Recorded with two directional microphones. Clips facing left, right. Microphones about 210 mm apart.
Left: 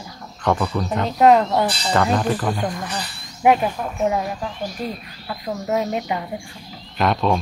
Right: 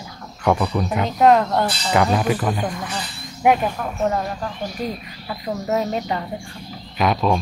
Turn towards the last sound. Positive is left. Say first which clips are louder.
# even
turn(degrees=-5)  # may be behind; listen again after turning